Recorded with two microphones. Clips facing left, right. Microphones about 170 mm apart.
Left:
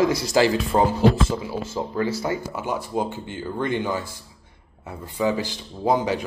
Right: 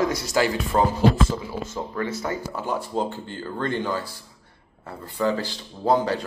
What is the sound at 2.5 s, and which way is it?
Speech, 10° left (ahead or behind).